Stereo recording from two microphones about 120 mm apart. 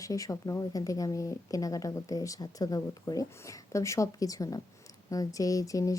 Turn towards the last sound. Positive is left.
turn(degrees=30)  # may be behind; listen again after turning